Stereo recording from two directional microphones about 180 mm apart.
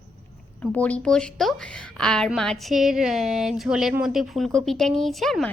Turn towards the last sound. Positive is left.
turn(degrees=0)  # may be behind; listen again after turning